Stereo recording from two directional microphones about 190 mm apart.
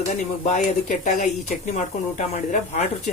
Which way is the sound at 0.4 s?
40° left (ahead or behind).